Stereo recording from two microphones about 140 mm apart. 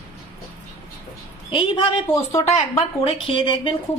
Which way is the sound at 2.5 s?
50° left (ahead or behind).